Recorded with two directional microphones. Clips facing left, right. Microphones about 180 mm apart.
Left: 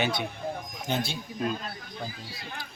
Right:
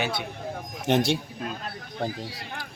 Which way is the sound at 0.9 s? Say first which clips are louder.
Right 7 dB; 75° right (ahead or behind).